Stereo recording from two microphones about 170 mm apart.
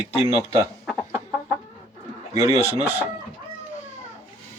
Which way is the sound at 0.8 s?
5° right (ahead or behind).